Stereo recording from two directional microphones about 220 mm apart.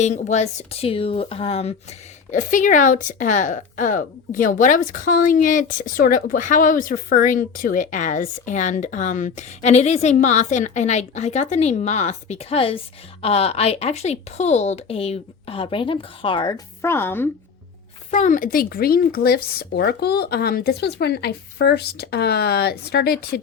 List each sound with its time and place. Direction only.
0.0 s speech: 30° left (ahead or behind); by 17.2 s 10° left (ahead or behind)
18.1 s speech: 35° left (ahead or behind)